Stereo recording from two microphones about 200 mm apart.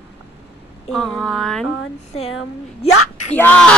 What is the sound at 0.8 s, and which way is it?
Speech, centre (ahead or behind).